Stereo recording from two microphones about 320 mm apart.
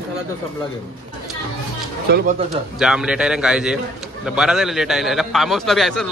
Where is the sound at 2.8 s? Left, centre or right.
Centre.